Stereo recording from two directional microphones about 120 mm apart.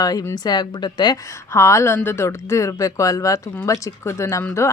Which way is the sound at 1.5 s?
25° left (ahead or behind).